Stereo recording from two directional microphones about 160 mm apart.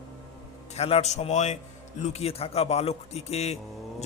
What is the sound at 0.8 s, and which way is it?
A man's voice, 40° left (ahead or behind).